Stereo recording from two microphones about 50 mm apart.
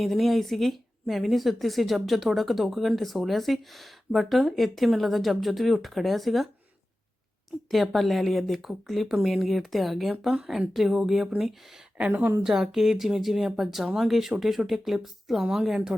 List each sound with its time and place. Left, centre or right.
0.0 s speech: centre
7.7 s speech: centre
11.9 s a woman's voice: right
12.4 s speech: centre